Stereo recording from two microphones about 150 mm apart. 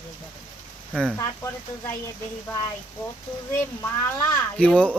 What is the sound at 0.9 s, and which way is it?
Speech, 10° right (ahead or behind).